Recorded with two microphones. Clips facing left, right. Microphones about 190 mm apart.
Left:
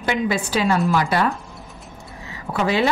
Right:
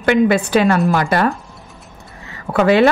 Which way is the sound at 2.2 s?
65° right (ahead or behind).